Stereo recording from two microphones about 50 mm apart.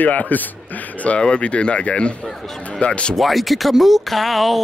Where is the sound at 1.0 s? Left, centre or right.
Left.